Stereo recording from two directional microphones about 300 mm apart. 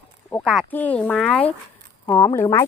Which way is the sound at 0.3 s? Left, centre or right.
Centre.